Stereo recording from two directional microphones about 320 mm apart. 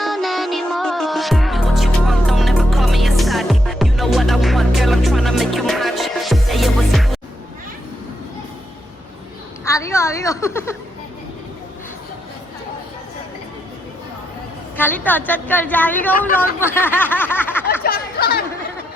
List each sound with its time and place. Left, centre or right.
0.0 s music: centre
9.6 s a woman's voice: centre
14.8 s a woman's voice: centre
17.8 s a sound: left